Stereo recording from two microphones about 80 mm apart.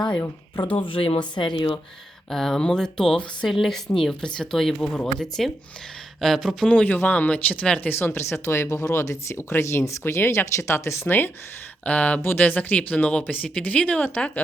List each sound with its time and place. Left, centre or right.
0.5 s speech: left
2.3 s speech: centre
6.7 s speech: centre
11.9 s speech: centre